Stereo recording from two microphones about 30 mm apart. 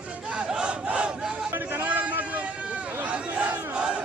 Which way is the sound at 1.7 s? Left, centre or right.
Right.